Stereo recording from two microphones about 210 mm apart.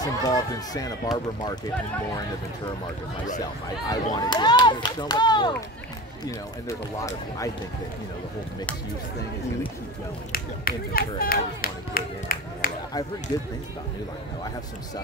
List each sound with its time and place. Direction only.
0.0 s speech: 20° left (ahead or behind)
3.9 s speech: 20° left (ahead or behind)
10.3 s speech: 45° left (ahead or behind)